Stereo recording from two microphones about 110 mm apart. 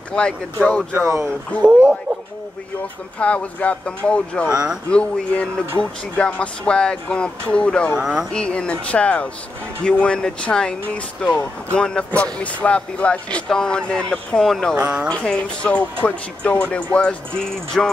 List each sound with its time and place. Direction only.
0.1 s speech: 10° left (ahead or behind)
1.0 s speech: 25° right (ahead or behind)
1.6 s speech: 10° right (ahead or behind)
3.2 s speech: 10° left (ahead or behind)
8.0 s speech: 5° right (ahead or behind)
8.3 s speech: 10° left (ahead or behind)
14.8 s speech: 10° right (ahead or behind)
15.1 s speech: 10° left (ahead or behind)